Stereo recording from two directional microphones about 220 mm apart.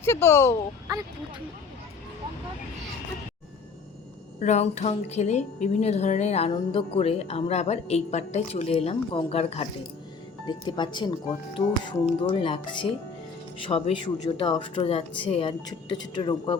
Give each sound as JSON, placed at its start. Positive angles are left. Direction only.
{"t": 0.0, "sound": "speech", "side_deg": 10}
{"t": 4.4, "sound": "speech", "side_deg": 30}